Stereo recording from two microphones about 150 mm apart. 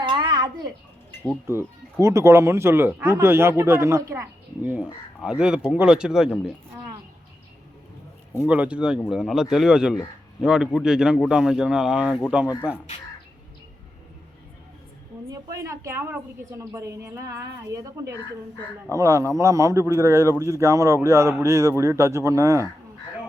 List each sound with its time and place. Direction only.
0.0 s a sound: 30° right (ahead or behind)
1.5 s speech: 20° right (ahead or behind)
8.4 s speech: 10° right (ahead or behind)
15.3 s a man's voice: 20° right (ahead or behind)